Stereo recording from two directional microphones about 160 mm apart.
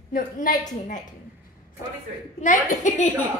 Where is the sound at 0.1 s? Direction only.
60° left (ahead or behind).